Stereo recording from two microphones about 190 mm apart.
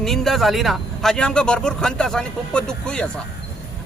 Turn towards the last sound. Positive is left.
turn(degrees=5)  # may be behind; listen again after turning